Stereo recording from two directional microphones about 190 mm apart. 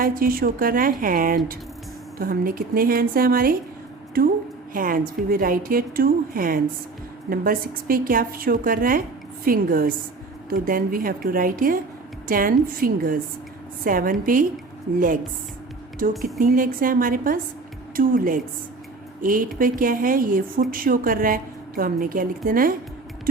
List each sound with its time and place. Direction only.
0.0 s speech: 50° right (ahead or behind)
4.7 s speech: 45° right (ahead or behind)
16.4 s speech: 45° right (ahead or behind)